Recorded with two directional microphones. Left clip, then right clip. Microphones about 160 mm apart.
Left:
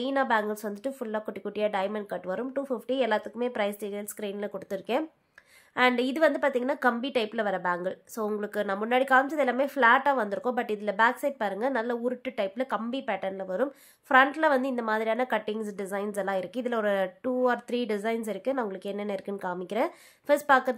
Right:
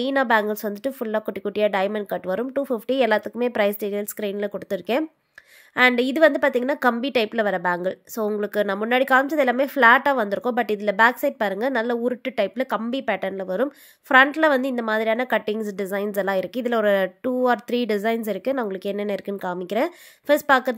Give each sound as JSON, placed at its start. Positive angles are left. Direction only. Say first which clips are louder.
{"t": 0.0, "sound": "a woman's voice", "louder": "right 6 dB", "side_deg": -40}